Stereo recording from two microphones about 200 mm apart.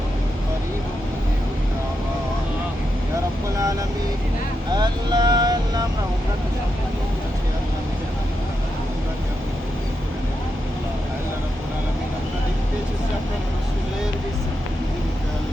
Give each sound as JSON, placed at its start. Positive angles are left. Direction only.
{"t": 4.7, "sound": "speech", "side_deg": -20}